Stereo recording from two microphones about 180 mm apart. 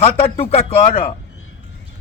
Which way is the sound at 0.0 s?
35° left (ahead or behind).